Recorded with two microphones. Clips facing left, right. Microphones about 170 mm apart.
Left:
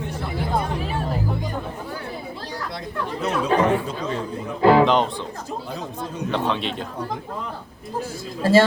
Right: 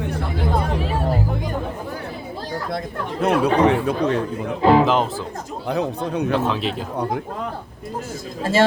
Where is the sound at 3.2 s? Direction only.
60° right (ahead or behind).